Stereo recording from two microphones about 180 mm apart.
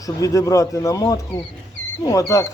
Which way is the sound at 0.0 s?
20° left (ahead or behind).